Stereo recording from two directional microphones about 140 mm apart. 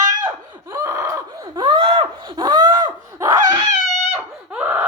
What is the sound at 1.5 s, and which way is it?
Gasp, 35° right (ahead or behind).